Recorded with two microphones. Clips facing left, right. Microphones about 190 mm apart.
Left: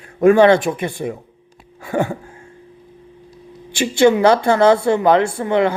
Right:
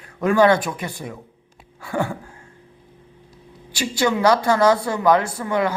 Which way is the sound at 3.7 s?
25° left (ahead or behind).